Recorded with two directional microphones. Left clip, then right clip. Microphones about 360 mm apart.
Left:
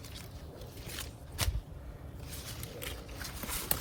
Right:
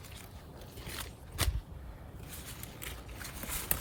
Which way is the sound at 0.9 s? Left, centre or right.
Centre.